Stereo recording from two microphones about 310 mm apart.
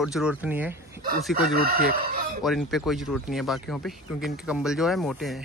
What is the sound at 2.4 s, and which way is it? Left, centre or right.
Speech, centre.